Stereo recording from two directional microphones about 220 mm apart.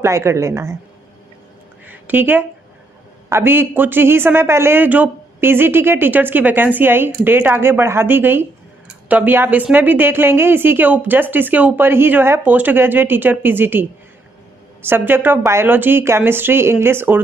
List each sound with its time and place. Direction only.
0.0 s a man's voice: 10° right (ahead or behind)
1.9 s a man's voice: 10° right (ahead or behind)